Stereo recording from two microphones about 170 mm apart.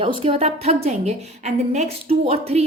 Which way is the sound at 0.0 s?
30° right (ahead or behind).